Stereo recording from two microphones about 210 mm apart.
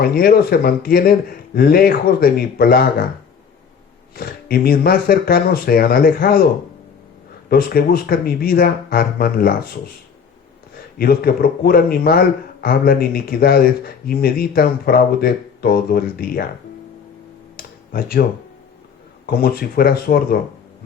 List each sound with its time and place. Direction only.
0.0 s a man's voice: 45° left (ahead or behind)
4.1 s a man's voice: 45° left (ahead or behind)
7.5 s a man's voice: 45° left (ahead or behind)
10.9 s a man's voice: 45° left (ahead or behind)
17.9 s a man's voice: 45° left (ahead or behind)